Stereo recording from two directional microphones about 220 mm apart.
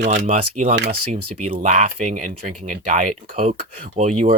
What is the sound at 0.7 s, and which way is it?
Speech, 50° right (ahead or behind).